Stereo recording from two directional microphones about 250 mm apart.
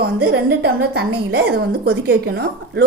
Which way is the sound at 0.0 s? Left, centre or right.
Right.